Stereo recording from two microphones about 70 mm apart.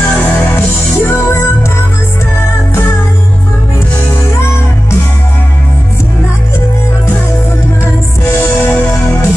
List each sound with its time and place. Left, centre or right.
0.9 s music: left
7.8 s music: left